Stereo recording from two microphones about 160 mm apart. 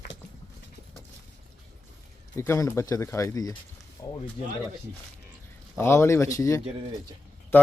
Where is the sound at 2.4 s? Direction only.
20° left (ahead or behind).